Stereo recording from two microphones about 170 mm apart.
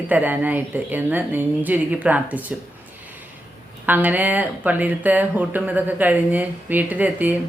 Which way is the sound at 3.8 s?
10° right (ahead or behind).